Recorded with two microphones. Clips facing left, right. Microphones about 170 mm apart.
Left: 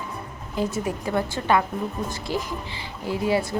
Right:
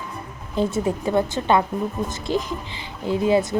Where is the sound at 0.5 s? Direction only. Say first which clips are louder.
Right 4 dB; 30° right (ahead or behind).